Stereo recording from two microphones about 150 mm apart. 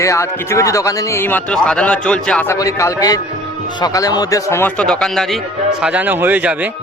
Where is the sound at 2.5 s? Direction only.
20° left (ahead or behind).